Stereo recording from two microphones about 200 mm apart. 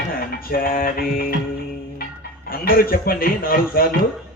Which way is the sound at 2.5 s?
45° left (ahead or behind).